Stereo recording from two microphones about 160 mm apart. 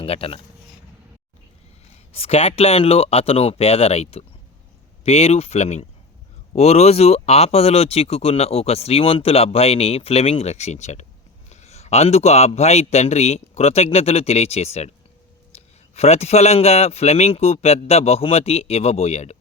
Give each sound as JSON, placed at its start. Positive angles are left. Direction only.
{"t": 0.0, "sound": "speech", "side_deg": 35}
{"t": 2.1, "sound": "speech", "side_deg": 40}
{"t": 15.5, "sound": "a sound", "side_deg": 40}
{"t": 16.0, "sound": "speech", "side_deg": 40}